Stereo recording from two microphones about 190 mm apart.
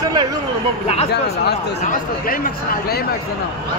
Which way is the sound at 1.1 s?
60° left (ahead or behind).